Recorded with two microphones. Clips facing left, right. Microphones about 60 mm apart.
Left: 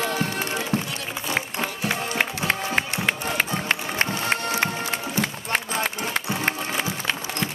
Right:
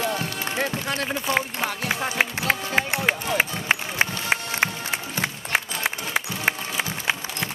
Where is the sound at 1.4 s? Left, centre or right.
Centre.